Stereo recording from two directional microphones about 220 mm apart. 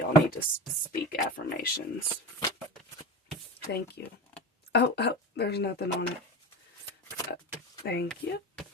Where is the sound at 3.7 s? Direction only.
50° left (ahead or behind).